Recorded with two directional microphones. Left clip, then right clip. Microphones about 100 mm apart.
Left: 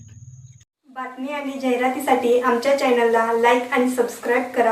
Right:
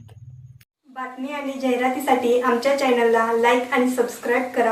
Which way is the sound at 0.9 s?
Centre (ahead or behind).